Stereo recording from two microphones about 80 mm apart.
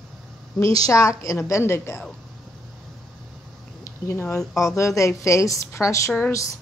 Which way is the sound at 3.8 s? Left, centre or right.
Left.